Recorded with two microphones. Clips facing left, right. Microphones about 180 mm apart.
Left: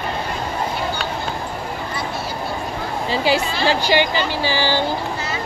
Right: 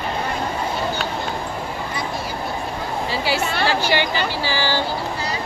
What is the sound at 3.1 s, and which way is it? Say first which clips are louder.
A woman's voice: left 4 dB; 20° left (ahead or behind).